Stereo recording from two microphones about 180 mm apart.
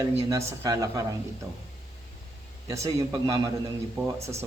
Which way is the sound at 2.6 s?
15° right (ahead or behind).